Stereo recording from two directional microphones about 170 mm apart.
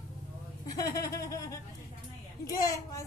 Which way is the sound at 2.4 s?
20° left (ahead or behind).